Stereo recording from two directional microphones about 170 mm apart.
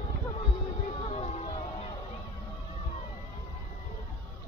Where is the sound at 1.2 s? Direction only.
40° left (ahead or behind).